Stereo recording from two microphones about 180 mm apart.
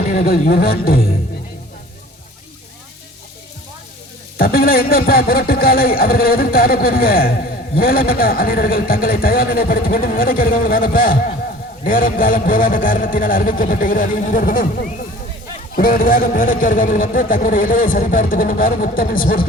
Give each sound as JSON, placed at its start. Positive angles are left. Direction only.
{"t": 0.1, "sound": "speech", "side_deg": 45}
{"t": 4.4, "sound": "a man's voice", "side_deg": 55}